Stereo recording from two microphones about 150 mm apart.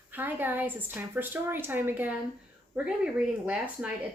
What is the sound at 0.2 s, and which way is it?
Speech, 15° right (ahead or behind).